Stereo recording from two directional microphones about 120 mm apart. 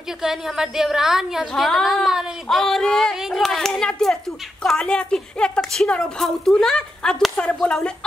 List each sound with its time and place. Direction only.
0.2 s a woman's voice: 5° right (ahead or behind)